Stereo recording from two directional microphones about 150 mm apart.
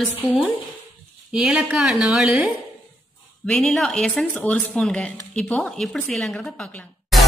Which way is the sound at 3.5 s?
Centre (ahead or behind).